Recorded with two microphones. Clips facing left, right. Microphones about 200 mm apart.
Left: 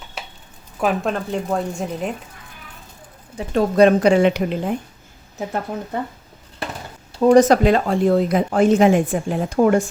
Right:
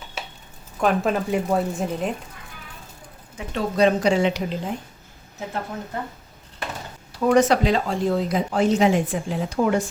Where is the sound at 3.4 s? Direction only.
35° left (ahead or behind).